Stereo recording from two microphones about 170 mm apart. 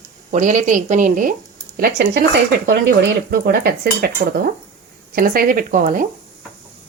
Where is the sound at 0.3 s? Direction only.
45° right (ahead or behind); by 2.2 s 65° right (ahead or behind).